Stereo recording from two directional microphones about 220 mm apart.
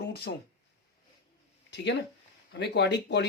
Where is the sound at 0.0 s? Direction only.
45° left (ahead or behind).